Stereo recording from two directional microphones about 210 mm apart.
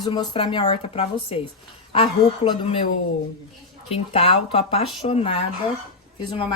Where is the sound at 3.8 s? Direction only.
30° left (ahead or behind).